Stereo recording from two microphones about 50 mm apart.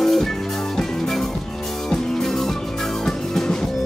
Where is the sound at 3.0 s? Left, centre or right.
Centre.